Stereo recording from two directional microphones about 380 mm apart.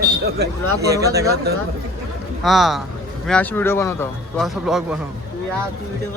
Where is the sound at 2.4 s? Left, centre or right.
Centre.